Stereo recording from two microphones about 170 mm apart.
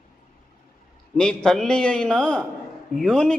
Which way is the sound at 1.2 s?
5° left (ahead or behind).